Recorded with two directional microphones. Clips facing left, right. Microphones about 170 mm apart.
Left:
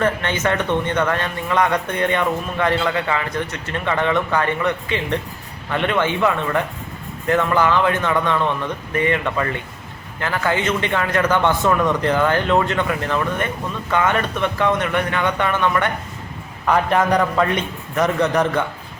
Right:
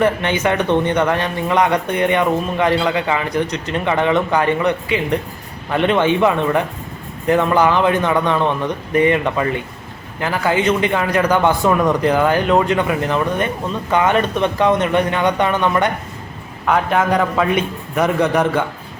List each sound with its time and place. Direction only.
0.0 s a man's voice: 15° right (ahead or behind)
16.6 s a man's voice: centre (ahead or behind)